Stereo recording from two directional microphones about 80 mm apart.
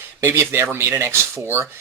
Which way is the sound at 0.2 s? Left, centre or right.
Right.